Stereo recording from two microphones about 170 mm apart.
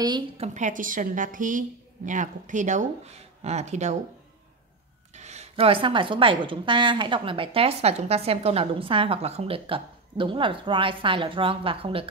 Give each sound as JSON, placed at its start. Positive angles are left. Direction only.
{"t": 0.4, "sound": "speech", "side_deg": -45}
{"t": 5.1, "sound": "a woman's voice", "side_deg": -40}